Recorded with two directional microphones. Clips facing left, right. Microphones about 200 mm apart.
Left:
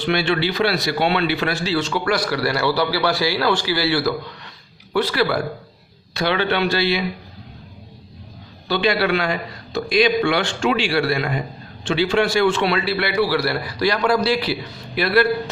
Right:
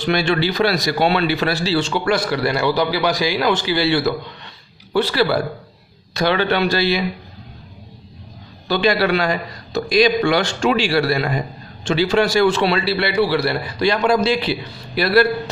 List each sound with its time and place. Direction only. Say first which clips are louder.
0.0 s a man's voice: right 2 dB; 45° right (ahead or behind); by 5.4 s 30° right (ahead or behind)
6.1 s a man's voice: right 2 dB; 45° right (ahead or behind)
8.6 s a man's voice: right 2 dB; 40° right (ahead or behind); by 14.6 s 20° right (ahead or behind)
15.0 s a man's voice: right 2 dB; 35° right (ahead or behind)